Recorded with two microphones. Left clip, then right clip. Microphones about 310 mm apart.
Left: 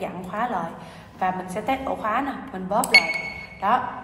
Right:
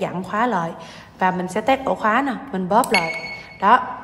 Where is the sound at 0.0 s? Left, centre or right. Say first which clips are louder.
Right 6 dB; right.